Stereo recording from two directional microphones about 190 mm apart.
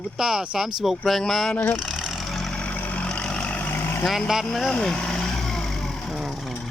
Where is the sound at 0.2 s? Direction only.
5° right (ahead or behind).